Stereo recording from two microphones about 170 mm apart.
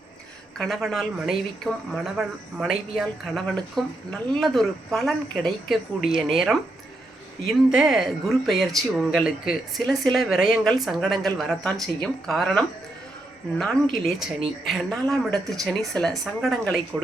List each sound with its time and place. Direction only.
0.6 s speech: centre (ahead or behind)
7.7 s speech: 5° right (ahead or behind)
13.9 s speech: centre (ahead or behind)